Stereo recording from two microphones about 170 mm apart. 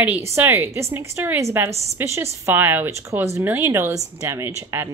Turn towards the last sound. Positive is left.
turn(degrees=-15)  # may be behind; listen again after turning